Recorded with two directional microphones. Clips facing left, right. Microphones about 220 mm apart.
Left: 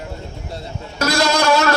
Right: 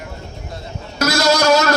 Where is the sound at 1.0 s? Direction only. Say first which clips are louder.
Right 2 dB; 40° right (ahead or behind).